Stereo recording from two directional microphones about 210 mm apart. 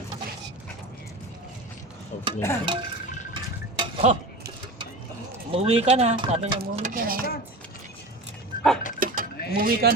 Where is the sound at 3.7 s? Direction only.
30° right (ahead or behind).